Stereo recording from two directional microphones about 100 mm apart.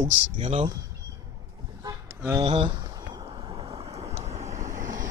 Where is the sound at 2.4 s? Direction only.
55° right (ahead or behind).